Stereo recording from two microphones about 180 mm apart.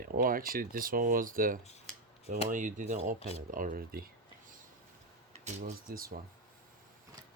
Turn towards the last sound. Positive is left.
turn(degrees=-50)  # may be behind; listen again after turning